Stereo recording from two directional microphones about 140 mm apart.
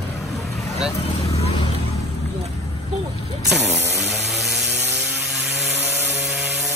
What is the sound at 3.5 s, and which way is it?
Chainsaw, centre (ahead or behind).